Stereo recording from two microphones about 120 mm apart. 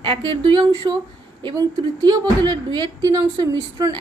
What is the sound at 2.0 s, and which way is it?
A woman's voice, 40° right (ahead or behind).